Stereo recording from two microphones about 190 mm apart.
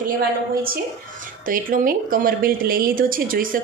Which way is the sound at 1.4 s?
45° right (ahead or behind).